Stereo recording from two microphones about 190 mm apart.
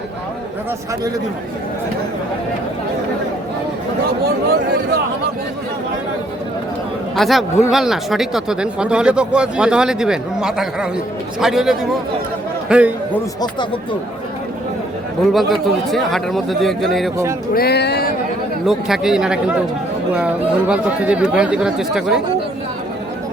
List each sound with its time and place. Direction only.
7.2 s a man's voice: centre (ahead or behind)
15.3 s speech: centre (ahead or behind)
17.5 s speech: 55° left (ahead or behind)
18.6 s speech: centre (ahead or behind)